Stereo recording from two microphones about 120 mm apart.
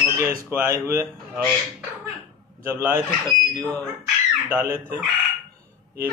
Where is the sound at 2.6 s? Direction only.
20° right (ahead or behind).